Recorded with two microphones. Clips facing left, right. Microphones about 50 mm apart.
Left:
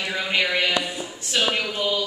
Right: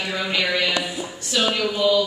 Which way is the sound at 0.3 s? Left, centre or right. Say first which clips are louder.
Left 1 dB; left.